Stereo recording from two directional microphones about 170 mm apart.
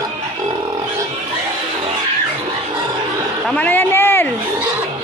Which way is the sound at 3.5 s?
10° left (ahead or behind).